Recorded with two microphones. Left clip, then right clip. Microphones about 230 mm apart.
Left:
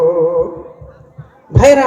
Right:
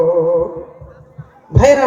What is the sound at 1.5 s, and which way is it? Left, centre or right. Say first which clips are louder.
Music: left 2 dB; left.